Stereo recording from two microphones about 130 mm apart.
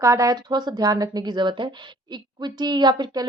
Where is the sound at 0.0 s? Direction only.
25° right (ahead or behind).